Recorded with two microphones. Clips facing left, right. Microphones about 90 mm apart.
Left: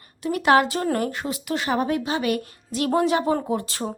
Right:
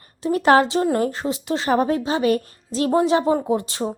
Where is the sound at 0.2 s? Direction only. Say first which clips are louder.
Right 3 dB; 30° right (ahead or behind).